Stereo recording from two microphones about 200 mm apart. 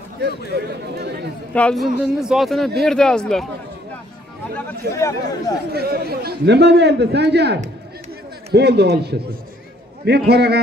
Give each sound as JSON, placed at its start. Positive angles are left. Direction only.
{"t": 0.5, "sound": "a man's voice", "side_deg": -55}
{"t": 1.5, "sound": "speech", "side_deg": 5}
{"t": 4.9, "sound": "speech", "side_deg": 15}
{"t": 5.7, "sound": "a man's voice", "side_deg": -50}